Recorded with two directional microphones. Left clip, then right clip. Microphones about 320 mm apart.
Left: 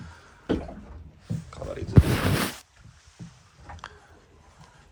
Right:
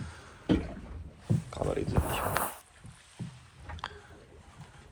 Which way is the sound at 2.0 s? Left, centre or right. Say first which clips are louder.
Left 4 dB; left.